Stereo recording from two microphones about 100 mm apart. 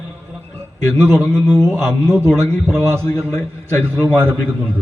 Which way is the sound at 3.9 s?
20° right (ahead or behind).